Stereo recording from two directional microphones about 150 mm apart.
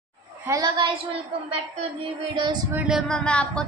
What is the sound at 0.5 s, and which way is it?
Speech, 30° right (ahead or behind).